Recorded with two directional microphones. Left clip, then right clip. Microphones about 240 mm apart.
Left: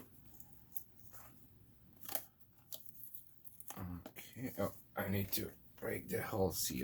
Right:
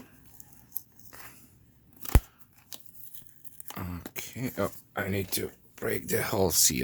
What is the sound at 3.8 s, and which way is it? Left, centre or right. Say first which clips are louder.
Speech: right 13 dB; right.